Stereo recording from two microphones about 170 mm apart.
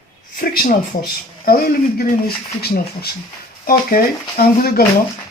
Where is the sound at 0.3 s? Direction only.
55° left (ahead or behind).